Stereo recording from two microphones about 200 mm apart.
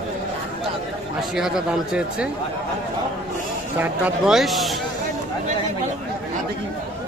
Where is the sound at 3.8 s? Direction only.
10° right (ahead or behind).